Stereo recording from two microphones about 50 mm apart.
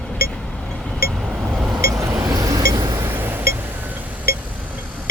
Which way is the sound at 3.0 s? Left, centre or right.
Right.